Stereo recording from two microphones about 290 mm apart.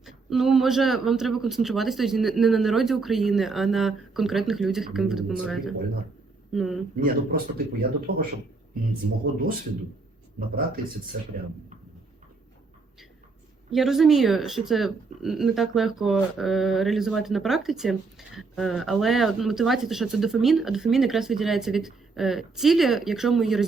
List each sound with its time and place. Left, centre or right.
0.0 s speech: centre
7.0 s speech: right
10.5 s speech: right
13.7 s speech: centre